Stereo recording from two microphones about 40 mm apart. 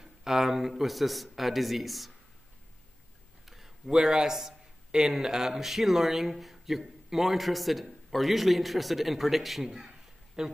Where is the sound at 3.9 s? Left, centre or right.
Centre.